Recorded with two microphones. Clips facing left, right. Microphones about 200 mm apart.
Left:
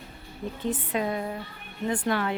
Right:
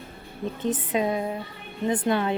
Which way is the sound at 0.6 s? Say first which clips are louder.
Right 3 dB; 20° right (ahead or behind).